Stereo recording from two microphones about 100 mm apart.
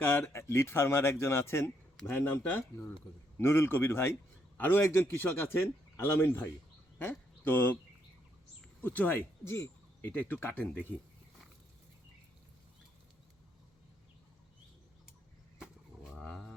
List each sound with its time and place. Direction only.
0.0 s a man's voice: 20° left (ahead or behind)
8.8 s speech: 15° left (ahead or behind)
15.6 s livestock: 5° right (ahead or behind)